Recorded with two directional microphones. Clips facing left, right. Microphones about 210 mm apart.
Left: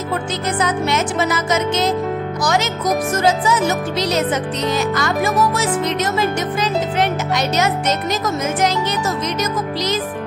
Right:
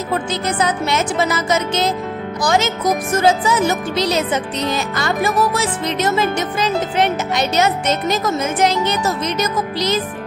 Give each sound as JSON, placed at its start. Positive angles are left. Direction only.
{"t": 0.6, "sound": "music", "side_deg": -30}
{"t": 2.4, "sound": "speech", "side_deg": -25}